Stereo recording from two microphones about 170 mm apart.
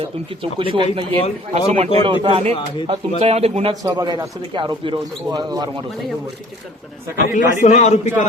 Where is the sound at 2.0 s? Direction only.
30° right (ahead or behind).